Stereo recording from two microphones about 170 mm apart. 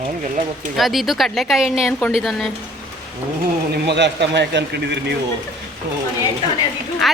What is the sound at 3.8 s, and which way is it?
A man's voice, 90° right.